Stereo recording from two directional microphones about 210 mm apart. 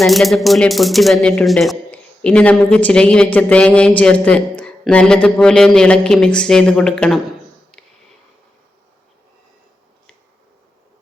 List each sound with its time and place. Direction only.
0.0 s speech: centre (ahead or behind)